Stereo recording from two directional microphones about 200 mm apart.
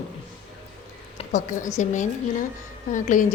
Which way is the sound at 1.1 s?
40° left (ahead or behind).